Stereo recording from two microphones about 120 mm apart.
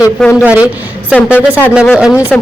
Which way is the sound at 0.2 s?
5° left (ahead or behind).